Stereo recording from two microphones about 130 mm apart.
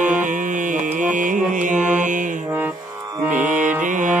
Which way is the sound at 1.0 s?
80° right.